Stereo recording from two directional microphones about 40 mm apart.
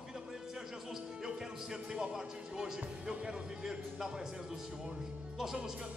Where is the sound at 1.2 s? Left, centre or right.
Centre.